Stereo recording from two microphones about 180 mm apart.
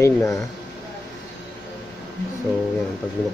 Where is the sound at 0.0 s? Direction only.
15° left (ahead or behind).